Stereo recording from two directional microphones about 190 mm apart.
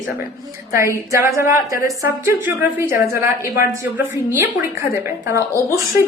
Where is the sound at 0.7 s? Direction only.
15° right (ahead or behind).